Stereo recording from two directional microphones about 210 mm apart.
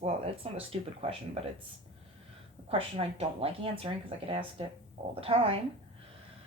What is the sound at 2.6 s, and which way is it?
Speech, 30° right (ahead or behind).